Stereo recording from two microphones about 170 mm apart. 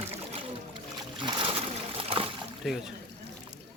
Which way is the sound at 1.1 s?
30° right (ahead or behind).